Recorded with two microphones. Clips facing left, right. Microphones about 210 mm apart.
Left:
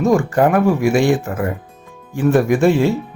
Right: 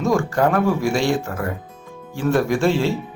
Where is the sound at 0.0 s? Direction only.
15° left (ahead or behind).